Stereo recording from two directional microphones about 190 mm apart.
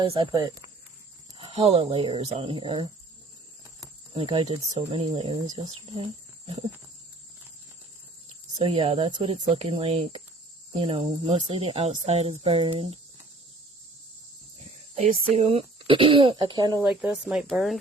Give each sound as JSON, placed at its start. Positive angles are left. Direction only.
{"t": 0.0, "sound": "speech", "side_deg": -25}
{"t": 8.5, "sound": "speech", "side_deg": -30}
{"t": 14.9, "sound": "speech", "side_deg": -35}
{"t": 16.8, "sound": "speech", "side_deg": -5}